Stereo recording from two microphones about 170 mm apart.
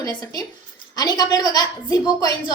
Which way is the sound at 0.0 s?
20° left (ahead or behind).